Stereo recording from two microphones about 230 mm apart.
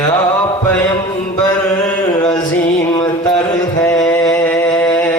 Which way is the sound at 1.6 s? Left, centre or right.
Centre.